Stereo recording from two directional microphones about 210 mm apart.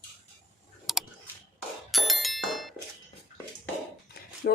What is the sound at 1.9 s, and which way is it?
Bicycle bell, centre (ahead or behind).